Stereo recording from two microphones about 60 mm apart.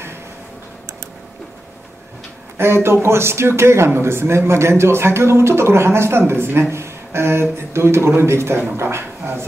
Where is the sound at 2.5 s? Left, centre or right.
Right.